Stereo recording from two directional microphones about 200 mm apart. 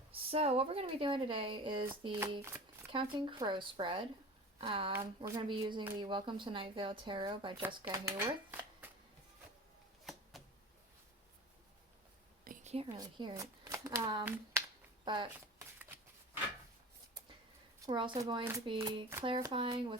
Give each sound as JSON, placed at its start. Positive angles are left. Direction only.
{"t": 0.1, "sound": "a woman's voice", "side_deg": -30}
{"t": 2.3, "sound": "speech", "side_deg": -15}
{"t": 2.9, "sound": "a woman's voice", "side_deg": -25}
{"t": 4.9, "sound": "a woman's voice", "side_deg": -15}
{"t": 12.5, "sound": "whispering", "side_deg": -30}
{"t": 13.0, "sound": "speech", "side_deg": -20}
{"t": 17.8, "sound": "a woman's voice", "side_deg": -25}